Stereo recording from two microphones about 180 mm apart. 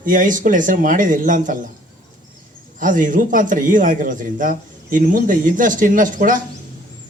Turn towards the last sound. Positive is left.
turn(degrees=-50)  # may be behind; listen again after turning